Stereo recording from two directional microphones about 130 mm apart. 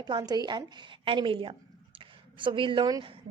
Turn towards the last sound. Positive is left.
turn(degrees=-35)  # may be behind; listen again after turning